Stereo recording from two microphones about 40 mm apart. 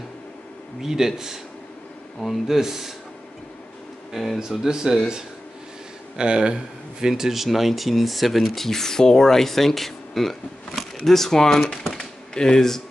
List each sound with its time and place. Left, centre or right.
0.8 s speech: centre
4.1 s speech: centre
4.4 s speech: centre
6.1 s speech: right; by 8.6 s centre
8.6 s speech: centre
11.6 s typewriter: centre
12.4 s speech: centre